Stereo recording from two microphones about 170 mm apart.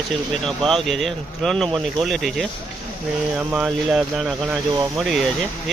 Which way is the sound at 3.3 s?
5° right (ahead or behind).